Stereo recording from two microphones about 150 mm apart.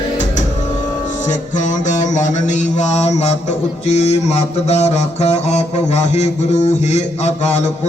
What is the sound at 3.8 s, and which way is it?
Mantra, 45° left (ahead or behind).